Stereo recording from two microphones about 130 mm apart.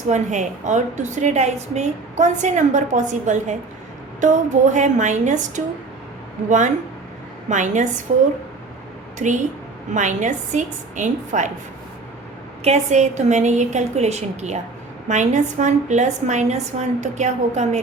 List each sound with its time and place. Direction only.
0.1 s a woman's voice: 70° right (ahead or behind)
7.5 s a woman's voice: 70° right (ahead or behind)
9.1 s a woman's voice: 70° right (ahead or behind)
12.6 s a woman's voice: 60° right (ahead or behind)